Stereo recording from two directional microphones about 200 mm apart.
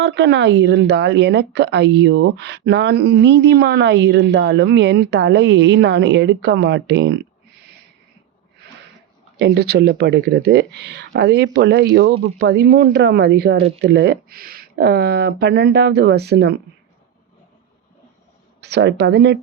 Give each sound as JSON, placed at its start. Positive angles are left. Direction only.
{"t": 0.0, "sound": "speech", "side_deg": -60}
{"t": 9.4, "sound": "speech", "side_deg": -55}
{"t": 18.6, "sound": "speech", "side_deg": -60}